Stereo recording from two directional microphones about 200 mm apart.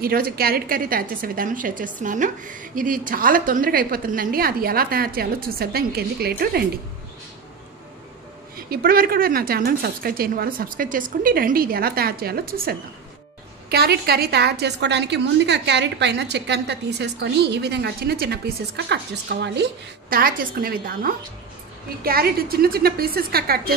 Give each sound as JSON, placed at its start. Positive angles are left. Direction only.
{"t": 0.0, "sound": "a woman's voice", "side_deg": -50}
{"t": 8.6, "sound": "a woman's voice", "side_deg": -50}